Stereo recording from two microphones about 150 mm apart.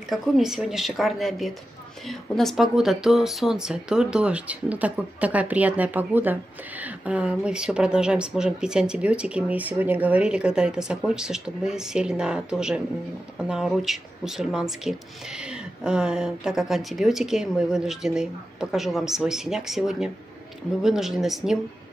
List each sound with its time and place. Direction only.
0.1 s speech: 5° right (ahead or behind)